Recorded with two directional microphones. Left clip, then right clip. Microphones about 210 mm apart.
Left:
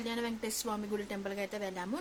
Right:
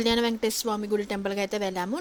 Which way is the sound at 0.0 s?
40° right (ahead or behind).